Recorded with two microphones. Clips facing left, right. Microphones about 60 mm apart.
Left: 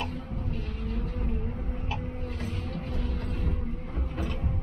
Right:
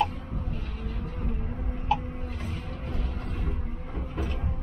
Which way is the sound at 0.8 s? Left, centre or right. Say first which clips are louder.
Left 4 dB; centre.